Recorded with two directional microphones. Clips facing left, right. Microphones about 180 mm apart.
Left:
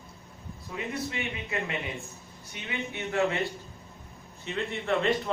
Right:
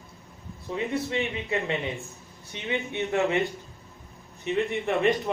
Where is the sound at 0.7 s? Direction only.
30° right (ahead or behind).